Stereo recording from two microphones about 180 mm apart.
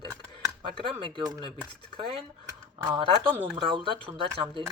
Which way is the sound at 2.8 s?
25° right (ahead or behind).